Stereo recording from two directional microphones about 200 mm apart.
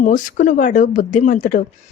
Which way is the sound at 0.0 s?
40° left (ahead or behind).